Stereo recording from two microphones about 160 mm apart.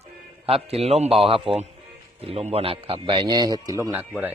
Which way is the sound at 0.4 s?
40° right (ahead or behind).